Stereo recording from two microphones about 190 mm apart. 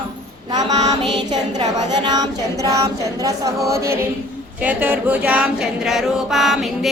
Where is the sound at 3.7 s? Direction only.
15° right (ahead or behind).